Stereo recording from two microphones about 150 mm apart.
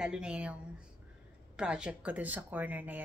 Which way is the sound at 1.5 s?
5° right (ahead or behind).